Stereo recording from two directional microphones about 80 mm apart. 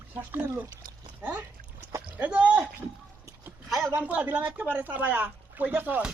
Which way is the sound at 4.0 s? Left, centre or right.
Centre.